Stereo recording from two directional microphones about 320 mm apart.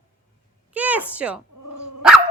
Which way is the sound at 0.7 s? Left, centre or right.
Centre.